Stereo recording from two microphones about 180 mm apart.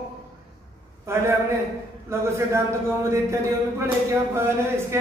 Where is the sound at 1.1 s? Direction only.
15° right (ahead or behind).